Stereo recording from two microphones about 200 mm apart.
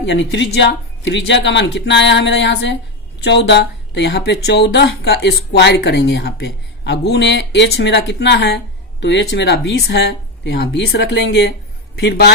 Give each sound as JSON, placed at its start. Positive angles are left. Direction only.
{"t": 0.0, "sound": "speech", "side_deg": 60}